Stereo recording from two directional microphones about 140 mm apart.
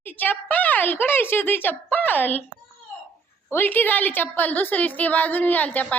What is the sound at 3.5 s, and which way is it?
A woman's voice, 15° left (ahead or behind).